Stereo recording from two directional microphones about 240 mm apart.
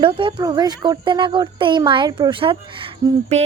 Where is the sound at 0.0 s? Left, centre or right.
Right.